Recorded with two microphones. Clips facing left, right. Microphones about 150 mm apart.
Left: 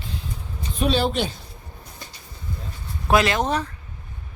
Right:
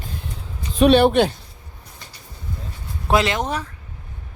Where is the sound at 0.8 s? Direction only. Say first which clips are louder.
Right 8 dB; 60° right (ahead or behind).